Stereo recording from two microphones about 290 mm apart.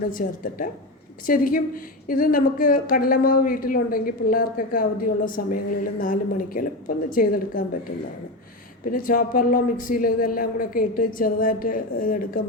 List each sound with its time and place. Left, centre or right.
0.1 s a woman's voice: left
8.8 s a woman's voice: left